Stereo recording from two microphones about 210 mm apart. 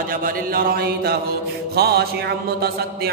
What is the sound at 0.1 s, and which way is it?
Mantra, 45° right (ahead or behind).